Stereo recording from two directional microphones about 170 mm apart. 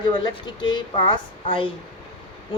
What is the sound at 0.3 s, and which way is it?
Speech, 25° left (ahead or behind).